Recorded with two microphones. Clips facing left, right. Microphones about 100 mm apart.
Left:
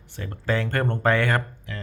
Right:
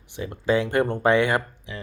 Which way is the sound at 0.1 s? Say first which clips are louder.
Right 4 dB; 15° right (ahead or behind).